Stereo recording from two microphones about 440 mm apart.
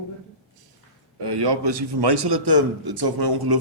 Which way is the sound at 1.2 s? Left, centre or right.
Right.